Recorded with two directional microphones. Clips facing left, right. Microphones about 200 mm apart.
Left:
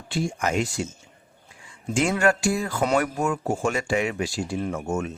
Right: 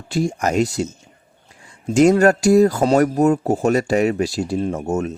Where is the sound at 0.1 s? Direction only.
40° right (ahead or behind).